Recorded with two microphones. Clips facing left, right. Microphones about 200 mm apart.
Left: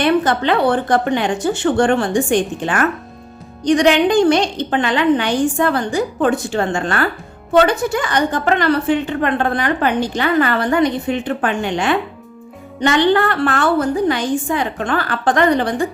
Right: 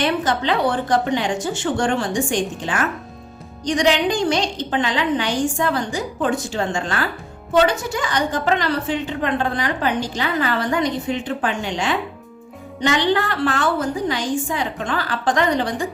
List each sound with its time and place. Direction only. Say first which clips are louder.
0.0 s a woman's voice: left 5 dB; 60° left (ahead or behind)